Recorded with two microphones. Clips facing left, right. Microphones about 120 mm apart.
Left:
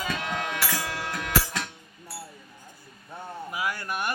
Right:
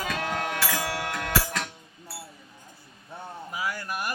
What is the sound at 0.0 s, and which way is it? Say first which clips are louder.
Music: right 1 dB; 40° right (ahead or behind).